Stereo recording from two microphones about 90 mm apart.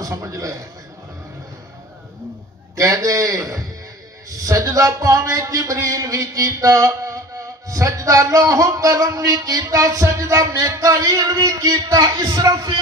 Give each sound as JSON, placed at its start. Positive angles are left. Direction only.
{"t": 0.0, "sound": "a man's voice", "side_deg": -35}
{"t": 2.7, "sound": "a man's voice", "side_deg": -40}